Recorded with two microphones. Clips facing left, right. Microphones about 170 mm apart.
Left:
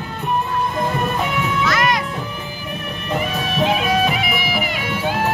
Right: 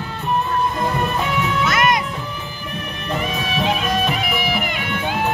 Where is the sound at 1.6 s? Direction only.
20° right (ahead or behind).